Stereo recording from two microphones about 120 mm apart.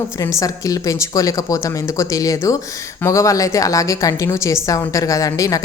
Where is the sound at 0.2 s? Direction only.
30° left (ahead or behind).